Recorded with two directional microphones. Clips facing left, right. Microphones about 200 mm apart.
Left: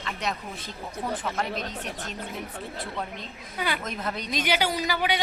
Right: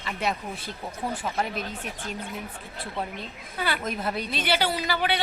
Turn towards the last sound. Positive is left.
turn(degrees=10)  # may be behind; listen again after turning